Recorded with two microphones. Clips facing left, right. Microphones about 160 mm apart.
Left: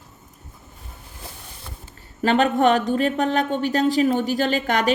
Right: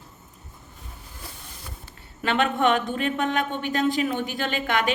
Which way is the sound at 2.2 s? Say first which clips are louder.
Left 5 dB; 40° left (ahead or behind).